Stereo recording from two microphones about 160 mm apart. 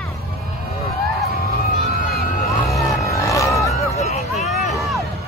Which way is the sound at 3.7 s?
45° left (ahead or behind).